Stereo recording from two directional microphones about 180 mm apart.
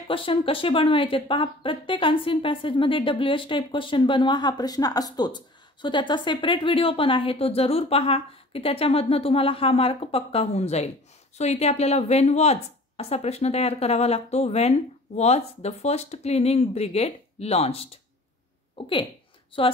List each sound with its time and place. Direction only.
0.1 s a woman's voice: 30° left (ahead or behind)